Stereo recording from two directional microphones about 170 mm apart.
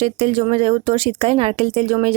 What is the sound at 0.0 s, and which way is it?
Speech, 35° right (ahead or behind).